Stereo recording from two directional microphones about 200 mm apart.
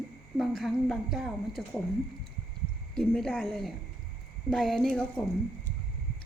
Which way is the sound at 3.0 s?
5° left (ahead or behind).